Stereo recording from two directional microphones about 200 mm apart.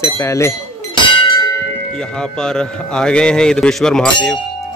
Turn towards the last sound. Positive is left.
turn(degrees=5)  # may be behind; listen again after turning